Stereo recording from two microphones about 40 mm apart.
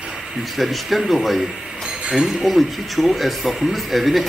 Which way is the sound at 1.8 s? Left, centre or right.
Centre.